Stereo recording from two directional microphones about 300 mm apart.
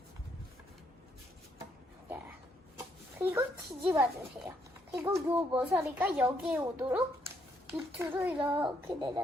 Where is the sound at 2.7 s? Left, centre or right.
Centre.